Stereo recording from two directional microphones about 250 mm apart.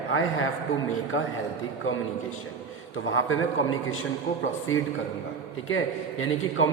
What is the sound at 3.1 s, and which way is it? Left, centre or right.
A man's voice, left.